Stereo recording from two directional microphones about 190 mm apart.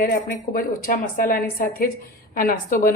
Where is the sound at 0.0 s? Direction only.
50° left (ahead or behind).